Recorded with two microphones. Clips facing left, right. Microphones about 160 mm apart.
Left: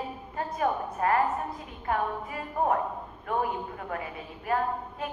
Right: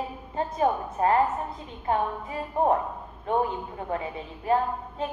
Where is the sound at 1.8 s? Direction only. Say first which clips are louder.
Right 3 dB; 25° right (ahead or behind).